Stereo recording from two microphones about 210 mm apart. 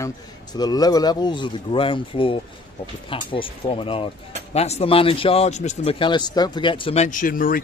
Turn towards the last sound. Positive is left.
turn(degrees=40)  # may be behind; listen again after turning